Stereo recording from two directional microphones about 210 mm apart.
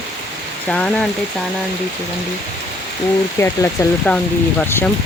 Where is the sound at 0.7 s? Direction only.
5° left (ahead or behind).